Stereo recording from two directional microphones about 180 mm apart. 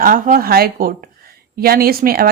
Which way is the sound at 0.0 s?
50° right (ahead or behind).